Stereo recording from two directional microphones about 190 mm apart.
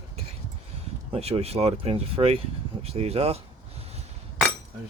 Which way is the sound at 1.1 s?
30° right (ahead or behind).